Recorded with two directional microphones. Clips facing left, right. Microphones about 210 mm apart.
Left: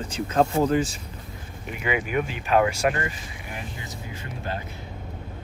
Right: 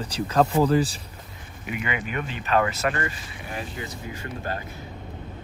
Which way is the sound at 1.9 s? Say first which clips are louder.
Left 7 dB; 10° left (ahead or behind).